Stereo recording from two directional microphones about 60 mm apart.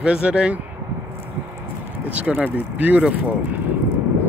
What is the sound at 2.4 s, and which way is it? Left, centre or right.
Speech, right.